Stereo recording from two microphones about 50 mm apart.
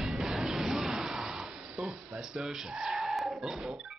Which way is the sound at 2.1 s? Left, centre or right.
Centre.